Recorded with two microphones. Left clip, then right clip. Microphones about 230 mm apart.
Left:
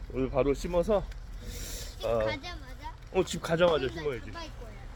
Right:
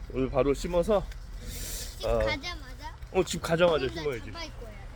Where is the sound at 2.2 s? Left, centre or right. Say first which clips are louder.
Right 3 dB; right.